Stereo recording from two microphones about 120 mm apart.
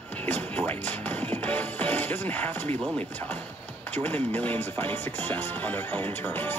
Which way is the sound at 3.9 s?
15° left (ahead or behind).